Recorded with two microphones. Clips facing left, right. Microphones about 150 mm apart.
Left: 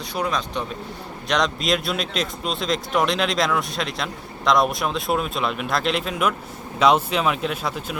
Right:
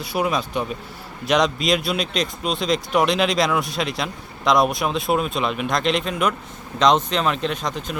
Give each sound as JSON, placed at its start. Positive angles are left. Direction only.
{"t": 0.0, "sound": "speech", "side_deg": -10}